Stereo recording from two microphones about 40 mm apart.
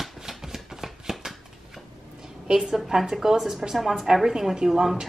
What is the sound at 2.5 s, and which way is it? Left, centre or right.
A woman's voice, centre.